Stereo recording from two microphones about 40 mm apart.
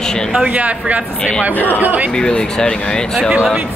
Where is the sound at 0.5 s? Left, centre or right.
Right.